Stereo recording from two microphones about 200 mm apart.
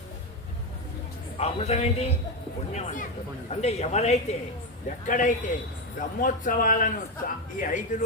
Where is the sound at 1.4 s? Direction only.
30° left (ahead or behind).